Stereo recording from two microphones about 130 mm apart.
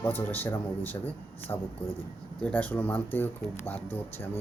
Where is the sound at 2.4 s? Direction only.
10° left (ahead or behind).